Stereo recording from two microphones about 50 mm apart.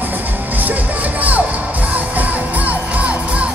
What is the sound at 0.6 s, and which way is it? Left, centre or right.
Music, right.